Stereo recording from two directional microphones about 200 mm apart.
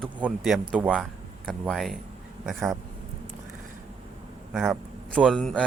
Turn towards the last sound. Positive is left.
turn(degrees=5)  # may be behind; listen again after turning